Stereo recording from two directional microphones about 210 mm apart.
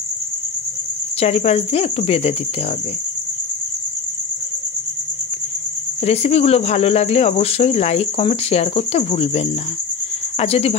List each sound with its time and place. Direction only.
1.2 s speech: 30° left (ahead or behind)
6.0 s speech: 30° left (ahead or behind)